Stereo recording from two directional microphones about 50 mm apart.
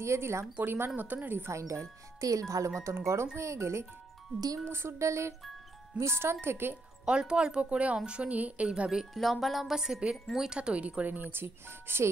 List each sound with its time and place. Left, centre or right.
0.0 s music: right
0.6 s speech: right
1.5 s speech: right
3.3 s music: right
4.6 s music: right
5.9 s speech: right
7.1 s a woman's voice: centre
8.6 s a woman's voice: centre
9.1 s speech: centre
10.1 s speech: centre
10.5 s speech: right